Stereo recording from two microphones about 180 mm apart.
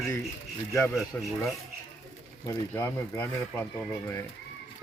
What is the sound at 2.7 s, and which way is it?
Speech, 10° left (ahead or behind).